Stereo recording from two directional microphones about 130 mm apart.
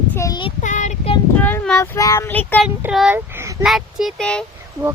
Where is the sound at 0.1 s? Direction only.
20° left (ahead or behind).